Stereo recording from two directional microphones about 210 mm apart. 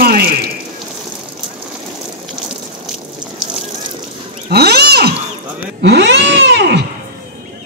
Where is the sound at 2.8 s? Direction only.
Centre (ahead or behind).